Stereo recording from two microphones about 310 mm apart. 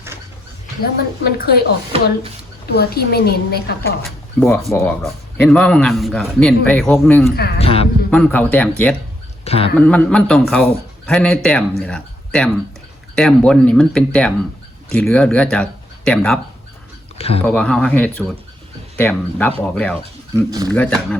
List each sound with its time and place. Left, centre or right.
0.8 s a woman's voice: left
2.7 s a woman's voice: left
4.0 s a man's voice: centre
7.3 s a woman's voice: left
7.6 s a woman's voice: centre
8.1 s a man's voice: centre
9.4 s a sound: centre
9.7 s a man's voice: centre
17.2 s speech: centre
17.4 s a man's voice: centre
20.3 s speech: centre
20.7 s a man's voice: centre